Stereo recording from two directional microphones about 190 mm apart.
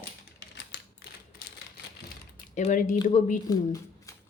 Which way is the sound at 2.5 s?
40° left (ahead or behind).